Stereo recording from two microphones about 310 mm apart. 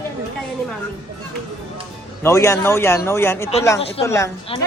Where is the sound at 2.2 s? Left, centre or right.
Centre.